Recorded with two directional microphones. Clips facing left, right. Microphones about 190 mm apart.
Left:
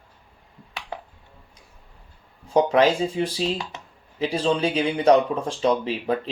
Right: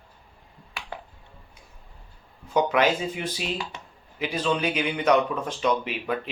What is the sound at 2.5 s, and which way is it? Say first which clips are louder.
Speech: left 4 dB; 30° left (ahead or behind).